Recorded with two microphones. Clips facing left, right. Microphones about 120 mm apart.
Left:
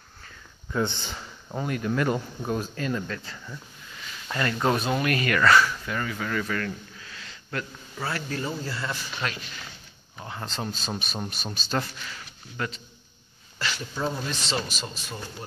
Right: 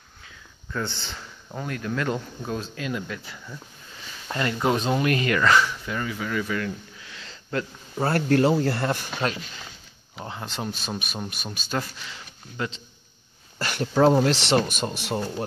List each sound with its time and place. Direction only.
0.7 s speech: 15° left (ahead or behind)
2.8 s speech: 5° right (ahead or behind)
7.2 s sniff: 25° right (ahead or behind)
8.0 s speech: 60° right (ahead or behind)
10.4 s speech: 10° right (ahead or behind)
13.6 s speech: 50° right (ahead or behind)
13.9 s speech: 85° right
14.6 s speech: 55° right (ahead or behind)
15.1 s speech: 45° right (ahead or behind)